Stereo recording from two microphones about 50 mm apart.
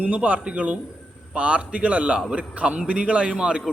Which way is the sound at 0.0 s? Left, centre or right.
Right.